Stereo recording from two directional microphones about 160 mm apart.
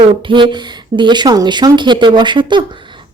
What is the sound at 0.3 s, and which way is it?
Speech, 30° right (ahead or behind).